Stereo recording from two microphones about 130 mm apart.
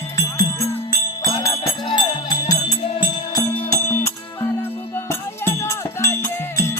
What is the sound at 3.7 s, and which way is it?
Music, 20° left (ahead or behind).